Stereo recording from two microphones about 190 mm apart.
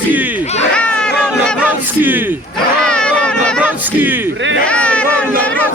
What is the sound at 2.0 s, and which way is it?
Speech, 10° right (ahead or behind).